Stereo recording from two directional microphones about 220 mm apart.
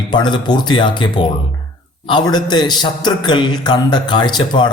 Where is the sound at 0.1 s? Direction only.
20° left (ahead or behind).